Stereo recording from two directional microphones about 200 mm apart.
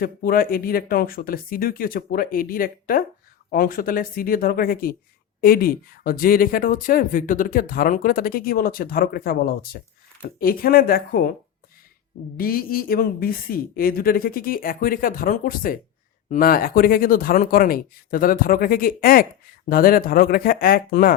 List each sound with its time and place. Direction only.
0.0 s speech: 45° left (ahead or behind)
12.4 s speech: 45° left (ahead or behind)